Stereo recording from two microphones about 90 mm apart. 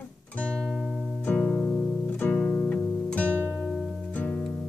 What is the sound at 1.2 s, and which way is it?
Music, 15° left (ahead or behind).